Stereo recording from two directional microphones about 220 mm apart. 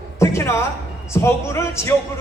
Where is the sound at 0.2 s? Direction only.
10° left (ahead or behind).